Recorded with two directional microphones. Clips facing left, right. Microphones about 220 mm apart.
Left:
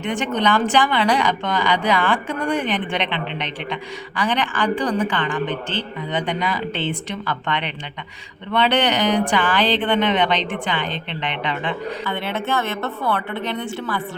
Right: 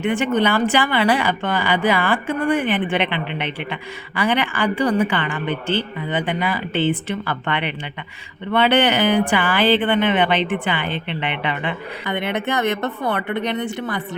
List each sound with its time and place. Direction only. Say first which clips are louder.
0.0 s speech: right 3 dB; 5° right (ahead or behind)